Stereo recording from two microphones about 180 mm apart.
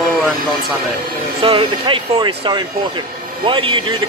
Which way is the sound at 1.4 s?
30° right (ahead or behind).